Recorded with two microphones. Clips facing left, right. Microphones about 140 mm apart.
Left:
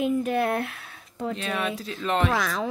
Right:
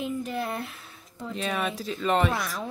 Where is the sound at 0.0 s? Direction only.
60° left (ahead or behind).